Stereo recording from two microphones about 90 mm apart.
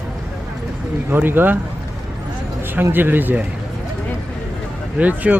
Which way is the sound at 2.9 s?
20° right (ahead or behind).